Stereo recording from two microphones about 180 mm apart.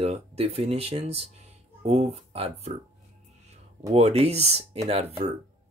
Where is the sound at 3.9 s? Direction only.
35° right (ahead or behind).